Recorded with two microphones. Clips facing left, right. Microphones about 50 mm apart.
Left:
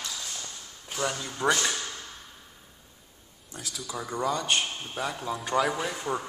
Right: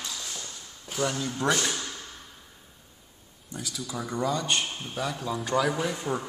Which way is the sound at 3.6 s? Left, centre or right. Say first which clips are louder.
Right 1 dB; centre.